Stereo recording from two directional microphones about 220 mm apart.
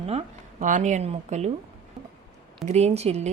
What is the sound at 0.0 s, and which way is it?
A woman's voice, 30° right (ahead or behind).